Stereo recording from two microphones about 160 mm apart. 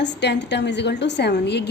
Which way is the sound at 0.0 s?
90° left.